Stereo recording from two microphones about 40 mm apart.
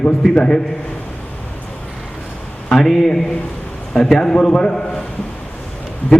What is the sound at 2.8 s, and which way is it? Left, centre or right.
A man's voice, centre.